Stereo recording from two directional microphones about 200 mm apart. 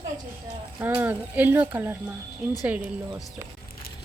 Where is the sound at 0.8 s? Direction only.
10° right (ahead or behind).